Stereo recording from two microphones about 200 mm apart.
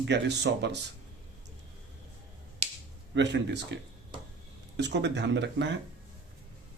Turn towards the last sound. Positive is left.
turn(degrees=-60)  # may be behind; listen again after turning